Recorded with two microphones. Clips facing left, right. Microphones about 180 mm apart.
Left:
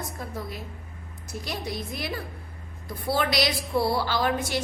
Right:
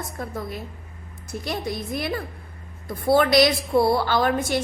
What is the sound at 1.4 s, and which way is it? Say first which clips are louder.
A woman's voice: right 4 dB; 55° right (ahead or behind).